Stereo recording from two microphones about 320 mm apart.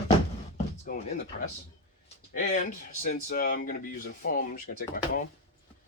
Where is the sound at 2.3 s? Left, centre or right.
Left.